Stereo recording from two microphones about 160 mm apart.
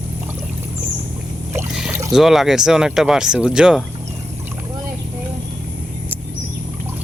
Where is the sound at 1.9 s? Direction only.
20° right (ahead or behind).